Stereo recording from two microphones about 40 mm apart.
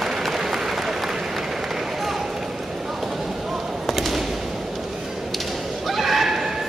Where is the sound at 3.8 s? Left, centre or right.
Centre.